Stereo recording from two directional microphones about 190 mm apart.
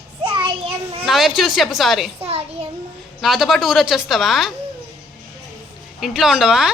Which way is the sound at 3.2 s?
Centre (ahead or behind).